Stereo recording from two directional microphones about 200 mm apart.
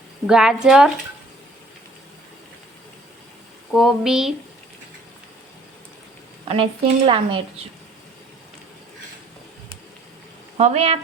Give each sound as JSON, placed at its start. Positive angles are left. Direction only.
{"t": 0.3, "sound": "a woman's voice", "side_deg": -5}
{"t": 3.7, "sound": "a woman's voice", "side_deg": 0}
{"t": 6.5, "sound": "a woman's voice", "side_deg": -30}
{"t": 10.6, "sound": "a woman's voice", "side_deg": -30}